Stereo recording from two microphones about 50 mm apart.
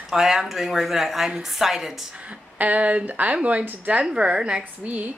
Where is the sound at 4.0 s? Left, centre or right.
Centre.